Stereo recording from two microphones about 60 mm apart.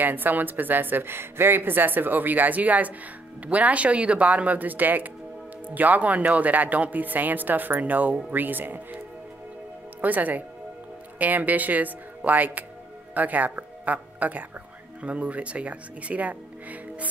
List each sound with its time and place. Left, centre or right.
0.0 s a woman's voice: right
10.0 s a woman's voice: right